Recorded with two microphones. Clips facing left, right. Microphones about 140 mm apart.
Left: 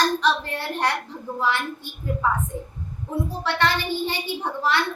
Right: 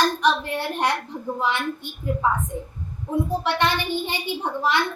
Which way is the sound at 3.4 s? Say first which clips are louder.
Right 1 dB; 15° right (ahead or behind).